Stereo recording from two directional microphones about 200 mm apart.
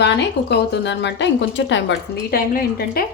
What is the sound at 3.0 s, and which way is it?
Speech, 45° left (ahead or behind).